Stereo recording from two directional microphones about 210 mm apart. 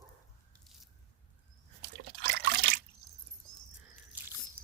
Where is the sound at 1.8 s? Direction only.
50° right (ahead or behind).